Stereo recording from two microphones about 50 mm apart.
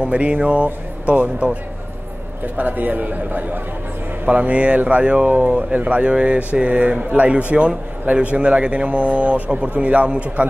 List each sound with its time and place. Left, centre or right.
0.0 s a man's voice: right
4.3 s speech: right